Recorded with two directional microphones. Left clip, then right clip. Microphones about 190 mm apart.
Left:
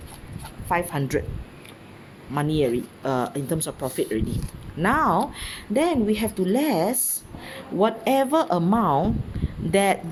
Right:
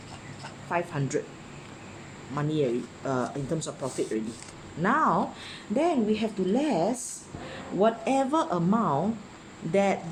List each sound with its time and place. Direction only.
0.7 s speech: 45° left (ahead or behind)
2.3 s speech: 45° left (ahead or behind)